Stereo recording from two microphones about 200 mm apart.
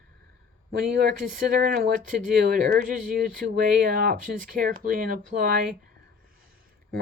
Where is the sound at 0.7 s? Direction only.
45° right (ahead or behind).